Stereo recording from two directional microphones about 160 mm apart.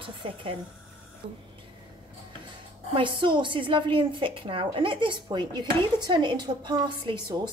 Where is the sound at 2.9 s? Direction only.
30° right (ahead or behind).